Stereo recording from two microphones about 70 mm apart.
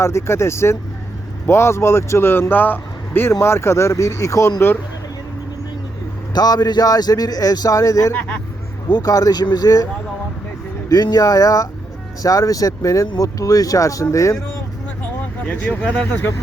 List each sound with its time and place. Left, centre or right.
0.0 s speech: left
6.3 s speech: left
8.1 s speech: centre
8.9 s speech: left
15.4 s speech: centre